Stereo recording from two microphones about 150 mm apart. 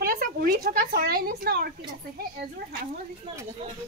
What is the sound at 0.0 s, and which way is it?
Speech, 75° right (ahead or behind).